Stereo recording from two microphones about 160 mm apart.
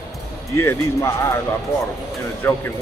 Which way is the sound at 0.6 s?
15° left (ahead or behind).